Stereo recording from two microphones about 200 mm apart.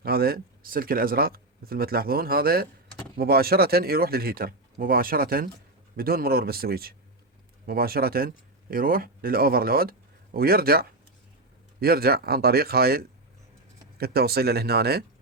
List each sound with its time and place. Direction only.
0.0 s speech: 50° right (ahead or behind)